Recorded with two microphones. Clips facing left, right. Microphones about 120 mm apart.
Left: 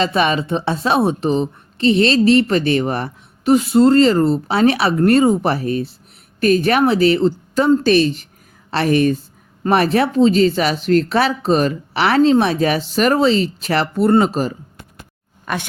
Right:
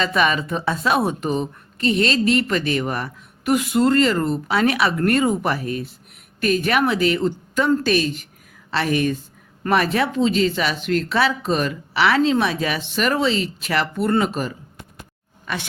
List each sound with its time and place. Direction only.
0.0 s speech: 30° left (ahead or behind)
15.5 s speech: 50° left (ahead or behind)